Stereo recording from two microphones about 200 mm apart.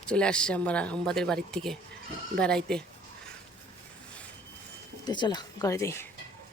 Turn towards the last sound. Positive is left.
turn(degrees=15)  # may be behind; listen again after turning